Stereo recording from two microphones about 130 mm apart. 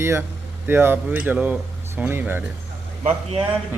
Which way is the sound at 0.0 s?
20° right (ahead or behind).